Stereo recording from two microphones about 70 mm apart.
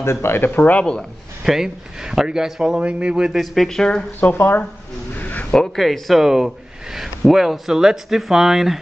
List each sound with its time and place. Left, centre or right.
0.0 s speech: left
0.7 s speech: centre
1.4 s speech: centre
3.3 s speech: centre
4.2 s speech: left
5.1 s a sound: left
5.5 s speech: centre